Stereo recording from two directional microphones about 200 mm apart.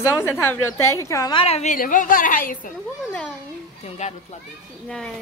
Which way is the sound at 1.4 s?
35° left (ahead or behind).